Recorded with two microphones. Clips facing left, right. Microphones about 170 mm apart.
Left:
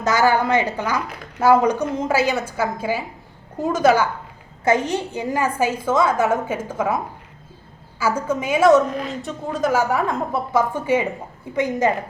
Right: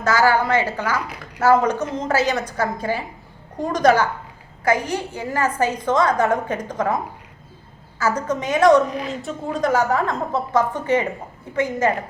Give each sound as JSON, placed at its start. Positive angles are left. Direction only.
{"t": 0.0, "sound": "a woman's voice", "side_deg": 20}
{"t": 4.6, "sound": "a woman's voice", "side_deg": 20}